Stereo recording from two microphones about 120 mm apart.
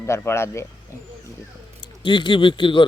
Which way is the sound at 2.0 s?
45° left (ahead or behind).